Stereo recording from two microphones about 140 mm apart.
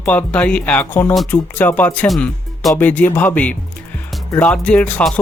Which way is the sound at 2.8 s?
10° left (ahead or behind).